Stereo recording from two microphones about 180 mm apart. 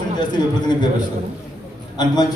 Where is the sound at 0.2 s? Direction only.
25° left (ahead or behind).